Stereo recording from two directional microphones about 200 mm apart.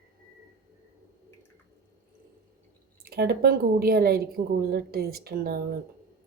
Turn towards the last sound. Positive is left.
turn(degrees=-50)  # may be behind; listen again after turning